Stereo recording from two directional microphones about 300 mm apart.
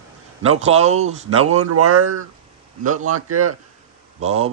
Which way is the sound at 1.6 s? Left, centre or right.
Right.